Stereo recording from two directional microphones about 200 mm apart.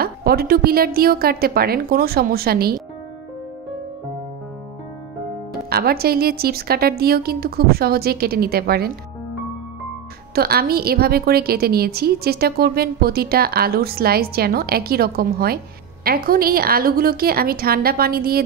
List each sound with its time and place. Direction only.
0.0 s a woman's voice: 50° right (ahead or behind)
5.7 s a woman's voice: 50° right (ahead or behind)
10.3 s a woman's voice: 50° right (ahead or behind)